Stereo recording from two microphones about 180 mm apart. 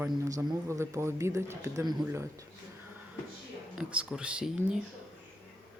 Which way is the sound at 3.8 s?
5° right (ahead or behind).